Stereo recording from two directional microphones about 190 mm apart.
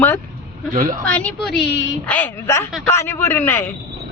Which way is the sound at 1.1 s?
5° left (ahead or behind).